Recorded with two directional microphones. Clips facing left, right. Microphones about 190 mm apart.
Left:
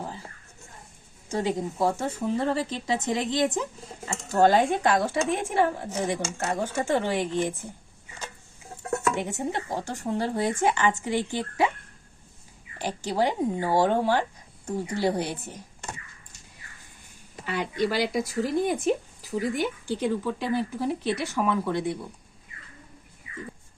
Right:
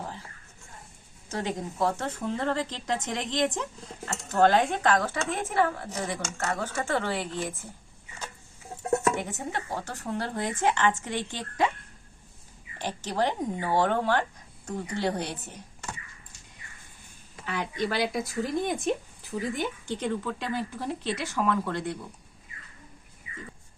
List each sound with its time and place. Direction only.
1.3 s speech: 10° left (ahead or behind)
8.8 s a sound: 25° right (ahead or behind)
9.5 s speech: 15° left (ahead or behind)
12.8 s speech: 10° left (ahead or behind)
17.4 s speech: 10° left (ahead or behind)